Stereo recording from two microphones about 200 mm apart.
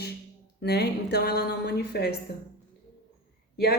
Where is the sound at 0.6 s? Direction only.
55° left (ahead or behind).